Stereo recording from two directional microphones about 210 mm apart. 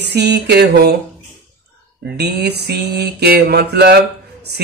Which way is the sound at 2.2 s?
50° right (ahead or behind).